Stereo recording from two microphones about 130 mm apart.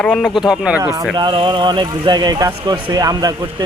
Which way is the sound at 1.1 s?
35° right (ahead or behind).